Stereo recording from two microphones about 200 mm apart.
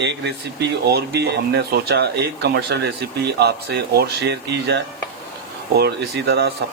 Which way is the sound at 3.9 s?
55° right (ahead or behind).